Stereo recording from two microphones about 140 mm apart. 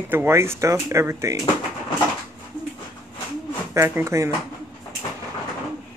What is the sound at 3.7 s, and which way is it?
Speech, 20° right (ahead or behind).